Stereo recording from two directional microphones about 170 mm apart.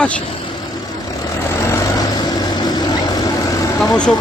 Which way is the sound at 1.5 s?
15° left (ahead or behind).